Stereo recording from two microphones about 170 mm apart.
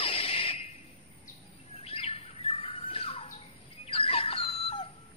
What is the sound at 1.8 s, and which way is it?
Bird, 35° left (ahead or behind).